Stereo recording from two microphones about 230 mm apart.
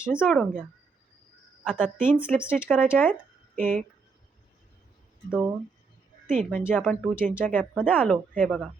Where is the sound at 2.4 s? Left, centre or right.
Centre.